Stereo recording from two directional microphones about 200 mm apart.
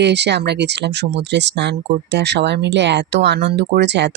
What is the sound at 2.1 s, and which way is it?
Speech, 60° right (ahead or behind).